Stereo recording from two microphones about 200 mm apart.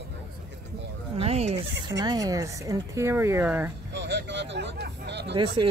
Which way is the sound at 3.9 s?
60° right (ahead or behind).